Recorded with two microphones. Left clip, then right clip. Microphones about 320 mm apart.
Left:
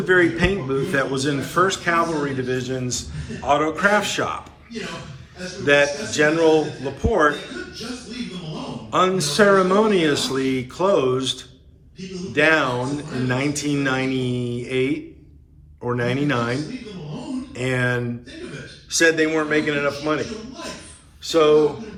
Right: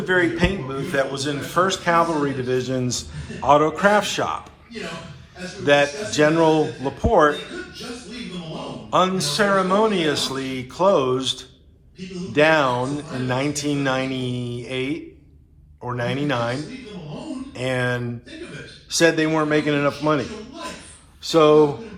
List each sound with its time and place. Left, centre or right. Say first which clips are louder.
0.0 s a man's voice: left 2 dB; centre
5.6 s a man's voice: even; centre
8.9 s a man's voice: even; centre
21.2 s speech: right 1 dB; centre